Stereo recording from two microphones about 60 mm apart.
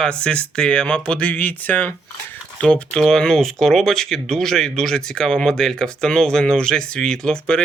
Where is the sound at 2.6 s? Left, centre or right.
Centre.